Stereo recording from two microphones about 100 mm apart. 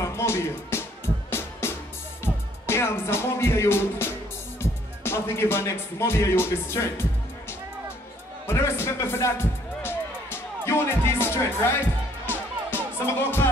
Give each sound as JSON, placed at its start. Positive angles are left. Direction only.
{"t": 0.0, "sound": "music", "side_deg": 25}
{"t": 4.6, "sound": "speech", "side_deg": 25}
{"t": 8.5, "sound": "speech", "side_deg": 25}
{"t": 12.3, "sound": "music", "side_deg": 20}